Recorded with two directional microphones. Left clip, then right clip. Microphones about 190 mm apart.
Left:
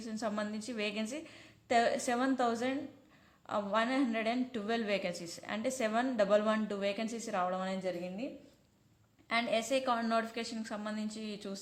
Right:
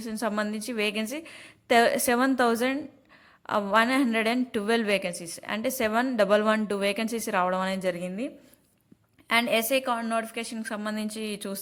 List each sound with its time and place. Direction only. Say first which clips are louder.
0.0 s a woman's voice: right 8 dB; 30° right (ahead or behind)